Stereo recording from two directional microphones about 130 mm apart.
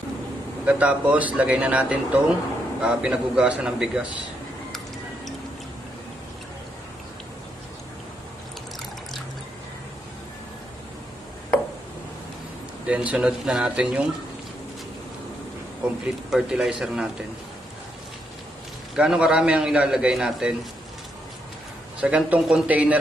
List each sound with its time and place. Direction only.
0.7 s speech: 10° right (ahead or behind)
12.8 s speech: 10° right (ahead or behind)
16.3 s a man's voice: 5° right (ahead or behind)
18.9 s a man's voice: 5° right (ahead or behind)
22.0 s speech: 10° right (ahead or behind)